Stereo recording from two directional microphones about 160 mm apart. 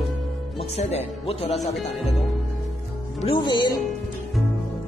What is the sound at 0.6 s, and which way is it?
Speech, 40° left (ahead or behind).